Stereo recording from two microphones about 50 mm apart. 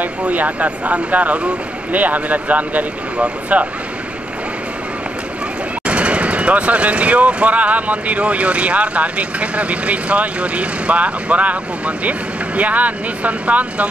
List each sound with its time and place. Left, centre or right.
0.0 s speech: right
5.9 s speech: right